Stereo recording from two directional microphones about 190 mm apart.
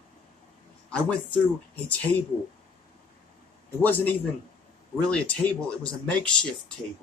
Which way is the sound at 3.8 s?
10° left (ahead or behind).